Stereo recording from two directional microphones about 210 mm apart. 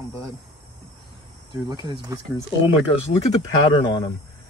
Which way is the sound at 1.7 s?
20° right (ahead or behind).